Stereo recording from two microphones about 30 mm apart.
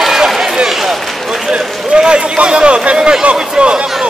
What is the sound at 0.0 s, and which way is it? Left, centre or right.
Run, centre.